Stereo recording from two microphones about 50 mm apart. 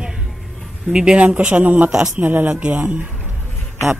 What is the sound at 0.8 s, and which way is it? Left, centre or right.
Speech, right.